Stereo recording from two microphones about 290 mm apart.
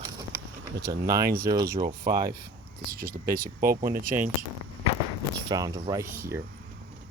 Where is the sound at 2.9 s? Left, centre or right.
Right.